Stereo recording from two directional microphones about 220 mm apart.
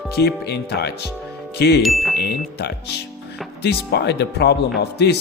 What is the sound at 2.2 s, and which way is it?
Speech, 50° left (ahead or behind).